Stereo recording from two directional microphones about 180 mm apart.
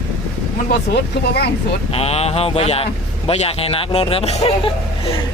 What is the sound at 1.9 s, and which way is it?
Speech, 35° left (ahead or behind).